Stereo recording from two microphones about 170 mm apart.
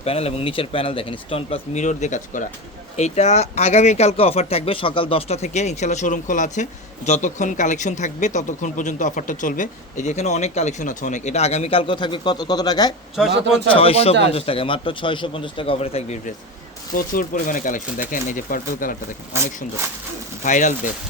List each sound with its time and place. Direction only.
0.0 s speech: 35° left (ahead or behind)
13.7 s speech: 35° left (ahead or behind)
16.9 s speech: 50° left (ahead or behind)
20.4 s speech: 50° left (ahead or behind)